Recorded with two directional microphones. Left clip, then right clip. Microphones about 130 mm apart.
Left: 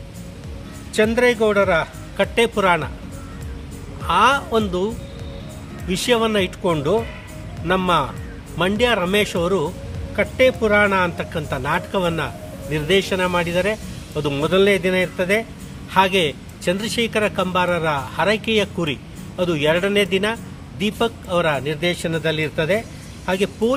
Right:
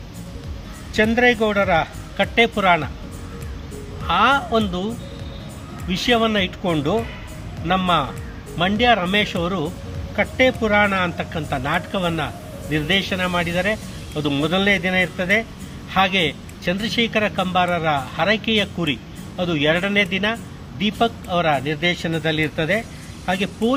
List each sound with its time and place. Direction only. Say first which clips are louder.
0.9 s speech: even; 30° left (ahead or behind)
4.0 s speech: left 1 dB; 40° left (ahead or behind)
5.9 s speech: even; 40° left (ahead or behind)